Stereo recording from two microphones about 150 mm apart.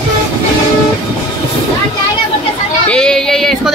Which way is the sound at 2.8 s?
5° left (ahead or behind).